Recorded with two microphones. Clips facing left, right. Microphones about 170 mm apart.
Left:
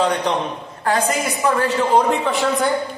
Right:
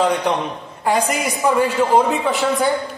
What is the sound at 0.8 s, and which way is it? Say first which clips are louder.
A woman's voice: right 1 dB; 15° right (ahead or behind).